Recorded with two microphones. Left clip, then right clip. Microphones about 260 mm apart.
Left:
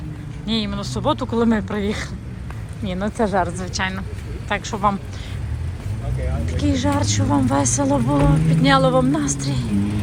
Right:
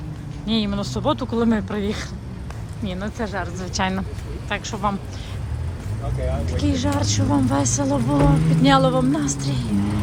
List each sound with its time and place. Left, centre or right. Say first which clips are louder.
0.4 s a woman's voice: even; centre
3.7 s speech: right 1 dB; centre
6.4 s speech: left 4 dB; centre